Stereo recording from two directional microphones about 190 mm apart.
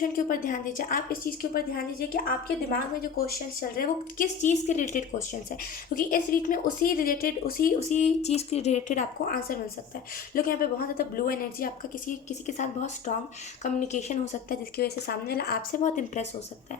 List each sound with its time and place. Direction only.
0.0 s a woman's voice: 45° left (ahead or behind)
7.9 s a woman's voice: 35° left (ahead or behind)